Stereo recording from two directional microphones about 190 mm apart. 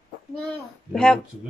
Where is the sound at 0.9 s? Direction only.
5° left (ahead or behind).